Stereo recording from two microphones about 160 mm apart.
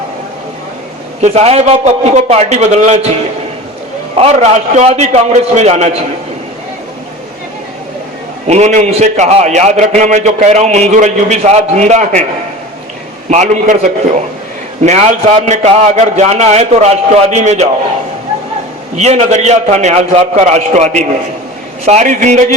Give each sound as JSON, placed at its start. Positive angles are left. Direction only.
{"t": 1.2, "sound": "a man's voice", "side_deg": -45}
{"t": 4.1, "sound": "a man's voice", "side_deg": -45}
{"t": 8.4, "sound": "a man's voice", "side_deg": -45}
{"t": 13.3, "sound": "a man's voice", "side_deg": -45}
{"t": 18.9, "sound": "a man's voice", "side_deg": -45}